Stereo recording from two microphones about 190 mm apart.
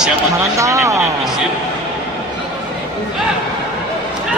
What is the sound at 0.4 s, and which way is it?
Speech, 15° right (ahead or behind).